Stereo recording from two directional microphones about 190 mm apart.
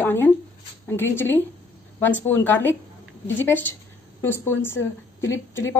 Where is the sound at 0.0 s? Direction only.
10° left (ahead or behind).